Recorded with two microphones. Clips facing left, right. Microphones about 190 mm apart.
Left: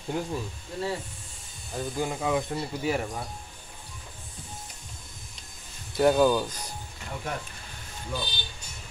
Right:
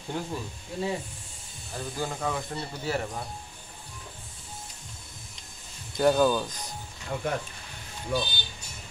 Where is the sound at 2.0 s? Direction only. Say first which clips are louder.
Left 4 dB; 10° left (ahead or behind).